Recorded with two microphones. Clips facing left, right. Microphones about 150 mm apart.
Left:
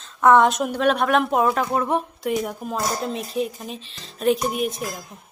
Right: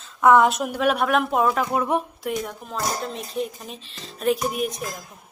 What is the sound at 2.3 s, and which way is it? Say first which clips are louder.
Speech: left 4 dB; 10° left (ahead or behind).